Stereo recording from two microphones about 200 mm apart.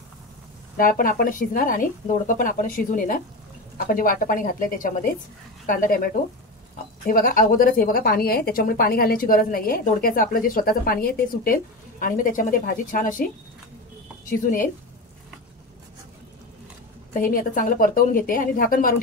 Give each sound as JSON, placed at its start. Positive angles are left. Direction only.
{"t": 0.7, "sound": "a woman's voice", "side_deg": 45}
{"t": 17.1, "sound": "a woman's voice", "side_deg": 45}